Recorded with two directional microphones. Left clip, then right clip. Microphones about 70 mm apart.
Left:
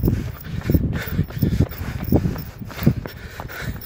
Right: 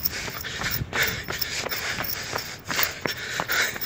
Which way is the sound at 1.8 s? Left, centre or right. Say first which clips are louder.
Left 4 dB; left.